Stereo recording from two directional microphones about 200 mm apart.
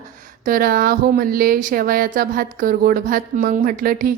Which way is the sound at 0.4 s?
45° right (ahead or behind).